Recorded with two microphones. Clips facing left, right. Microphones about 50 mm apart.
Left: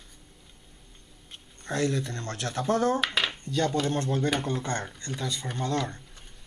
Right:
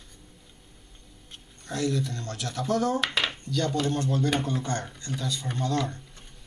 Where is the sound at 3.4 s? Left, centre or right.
Left.